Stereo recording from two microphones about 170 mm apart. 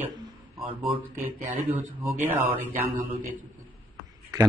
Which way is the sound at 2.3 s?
10° right (ahead or behind).